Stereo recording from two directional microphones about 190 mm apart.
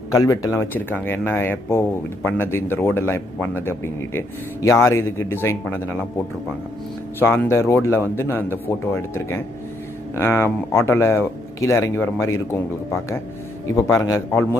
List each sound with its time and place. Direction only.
0.1 s speech: 20° left (ahead or behind)
7.2 s speech: 10° left (ahead or behind)